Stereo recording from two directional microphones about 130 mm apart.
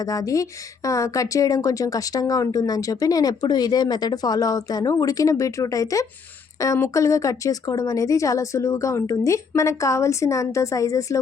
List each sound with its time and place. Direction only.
0.0 s speech: 25° left (ahead or behind)